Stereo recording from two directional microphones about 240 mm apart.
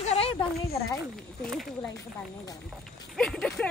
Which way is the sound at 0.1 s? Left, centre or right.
Left.